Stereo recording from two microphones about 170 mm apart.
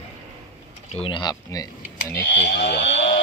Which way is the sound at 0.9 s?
30° left (ahead or behind).